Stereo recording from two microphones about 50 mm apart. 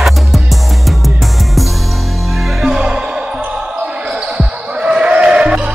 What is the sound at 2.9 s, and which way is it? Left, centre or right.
Music, centre.